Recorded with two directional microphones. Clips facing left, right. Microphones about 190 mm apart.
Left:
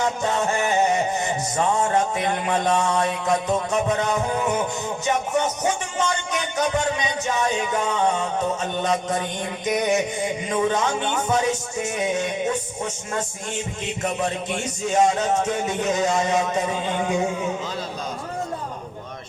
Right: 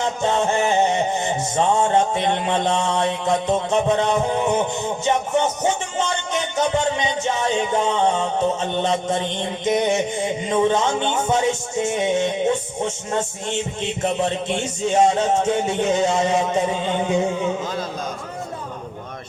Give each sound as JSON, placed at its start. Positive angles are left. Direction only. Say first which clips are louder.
{"t": 0.0, "sound": "music", "louder": "right 2 dB", "side_deg": -25}
{"t": 5.0, "sound": "a man's voice", "louder": "right 2 dB", "side_deg": -25}